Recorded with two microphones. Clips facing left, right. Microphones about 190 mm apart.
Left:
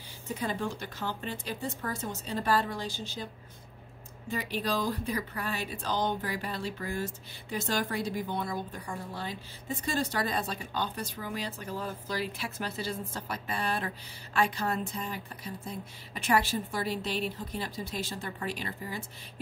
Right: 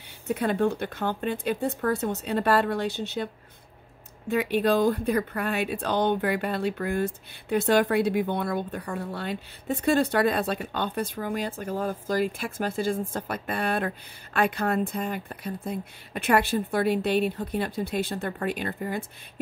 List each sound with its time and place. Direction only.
0.3 s speech: 65° right (ahead or behind)
4.3 s speech: 60° right (ahead or behind)